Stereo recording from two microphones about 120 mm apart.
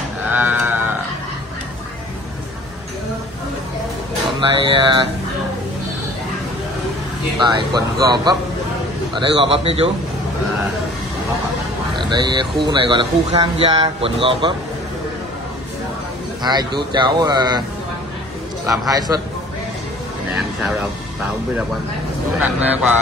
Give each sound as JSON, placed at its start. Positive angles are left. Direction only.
{"t": 0.3, "sound": "sheep", "side_deg": -15}
{"t": 4.4, "sound": "a man's voice", "side_deg": -45}
{"t": 7.7, "sound": "a man's voice", "side_deg": -35}
{"t": 12.0, "sound": "a man's voice", "side_deg": -40}
{"t": 16.4, "sound": "speech", "side_deg": -35}
{"t": 18.9, "sound": "speech", "side_deg": -35}
{"t": 22.4, "sound": "speech", "side_deg": -15}